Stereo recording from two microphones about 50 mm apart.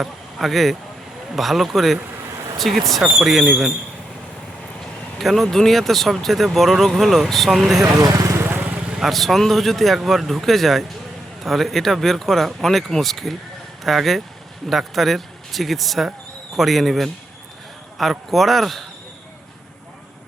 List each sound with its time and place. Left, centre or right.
0.0 s speech: centre
5.1 s speech: centre
7.9 s vehicle: right
8.4 s vehicle: right
9.0 s speech: centre